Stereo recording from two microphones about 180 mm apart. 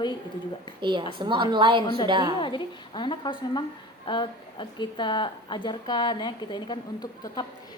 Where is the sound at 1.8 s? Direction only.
25° left (ahead or behind).